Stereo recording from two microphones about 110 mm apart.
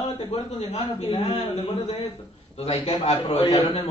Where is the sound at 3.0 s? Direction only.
70° left (ahead or behind).